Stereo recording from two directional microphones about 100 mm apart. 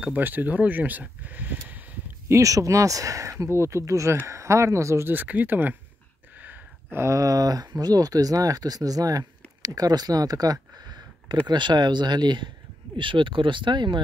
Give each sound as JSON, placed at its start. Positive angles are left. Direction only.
{"t": 0.0, "sound": "speech", "side_deg": -15}
{"t": 2.2, "sound": "speech", "side_deg": -30}